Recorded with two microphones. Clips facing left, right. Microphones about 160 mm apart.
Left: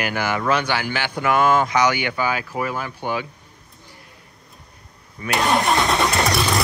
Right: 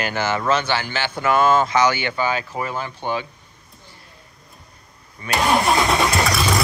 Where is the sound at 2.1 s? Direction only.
25° right (ahead or behind).